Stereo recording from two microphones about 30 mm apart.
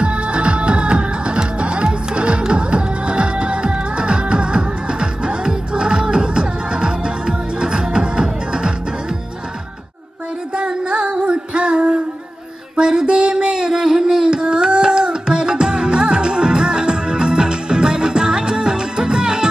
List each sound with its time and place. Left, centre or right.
0.0 s music: right
10.5 s music: right
12.7 s a sound: right